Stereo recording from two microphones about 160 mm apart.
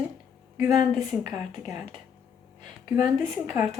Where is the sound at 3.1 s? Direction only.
15° right (ahead or behind).